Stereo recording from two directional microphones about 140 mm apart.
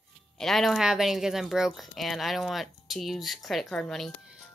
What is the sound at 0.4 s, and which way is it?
Speech, centre (ahead or behind).